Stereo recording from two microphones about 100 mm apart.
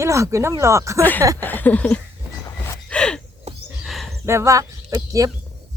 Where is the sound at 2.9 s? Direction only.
10° left (ahead or behind).